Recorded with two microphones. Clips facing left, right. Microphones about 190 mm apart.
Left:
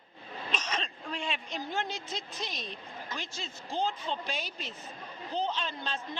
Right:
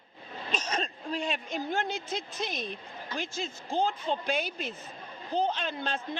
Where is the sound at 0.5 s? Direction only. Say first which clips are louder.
Right 4 dB; 40° right (ahead or behind).